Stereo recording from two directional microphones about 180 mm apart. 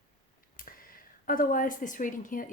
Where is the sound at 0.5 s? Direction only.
50° left (ahead or behind).